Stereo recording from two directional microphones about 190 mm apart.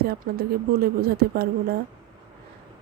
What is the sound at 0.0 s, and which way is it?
Speech, 55° right (ahead or behind).